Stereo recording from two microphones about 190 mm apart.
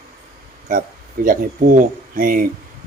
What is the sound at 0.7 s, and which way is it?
Speech, 45° right (ahead or behind).